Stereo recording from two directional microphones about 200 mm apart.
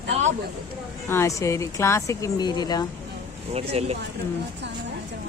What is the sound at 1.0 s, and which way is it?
Speech, 15° left (ahead or behind).